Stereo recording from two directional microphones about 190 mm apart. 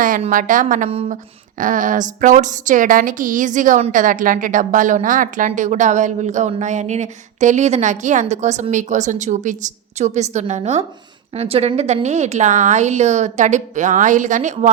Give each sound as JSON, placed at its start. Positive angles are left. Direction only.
{"t": 0.2, "sound": "speech", "side_deg": -45}